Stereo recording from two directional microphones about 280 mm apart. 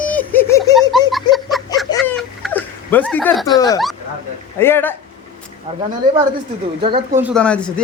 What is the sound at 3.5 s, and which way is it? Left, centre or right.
Speech, centre.